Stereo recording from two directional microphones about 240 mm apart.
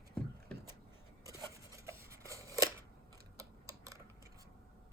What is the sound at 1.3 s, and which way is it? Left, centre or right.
Scissors, centre.